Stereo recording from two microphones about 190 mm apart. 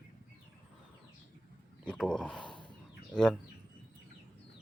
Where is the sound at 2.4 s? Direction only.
25° left (ahead or behind).